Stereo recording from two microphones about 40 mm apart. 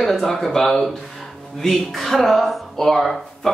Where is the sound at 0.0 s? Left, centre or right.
Centre.